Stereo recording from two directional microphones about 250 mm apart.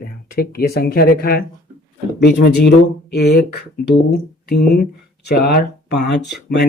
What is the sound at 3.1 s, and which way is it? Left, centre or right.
Speech, left.